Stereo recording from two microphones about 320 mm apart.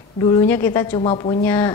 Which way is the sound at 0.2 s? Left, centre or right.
Centre.